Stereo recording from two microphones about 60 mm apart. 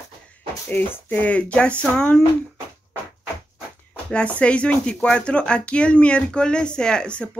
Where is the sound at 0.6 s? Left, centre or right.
Left.